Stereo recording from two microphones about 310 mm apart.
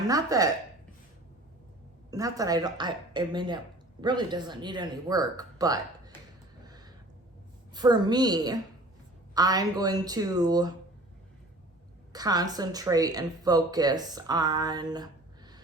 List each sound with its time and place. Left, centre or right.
0.1 s speech: centre
2.0 s speech: centre
6.7 s a sound: centre
7.7 s speech: centre
12.1 s speech: centre